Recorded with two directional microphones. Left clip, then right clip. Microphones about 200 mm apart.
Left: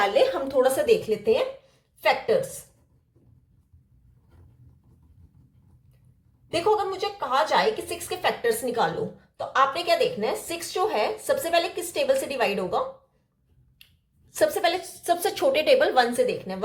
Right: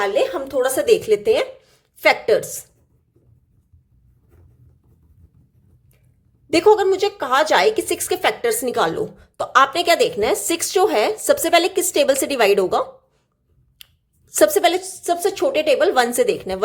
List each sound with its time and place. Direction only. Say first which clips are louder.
0.0 s a woman's voice: right 2 dB; 20° right (ahead or behind); by 2.3 s 55° right (ahead or behind)
6.7 s a woman's voice: right 9 dB; 60° right (ahead or behind)
14.3 s a woman's voice: right 8 dB; 45° right (ahead or behind)
15.0 s a woman's voice: right 3 dB; 25° right (ahead or behind); by 16.6 s 45° right (ahead or behind)